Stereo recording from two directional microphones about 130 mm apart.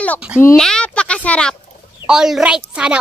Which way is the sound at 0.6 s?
5° left (ahead or behind).